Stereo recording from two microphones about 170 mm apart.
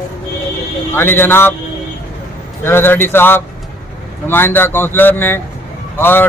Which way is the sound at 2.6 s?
15° left (ahead or behind).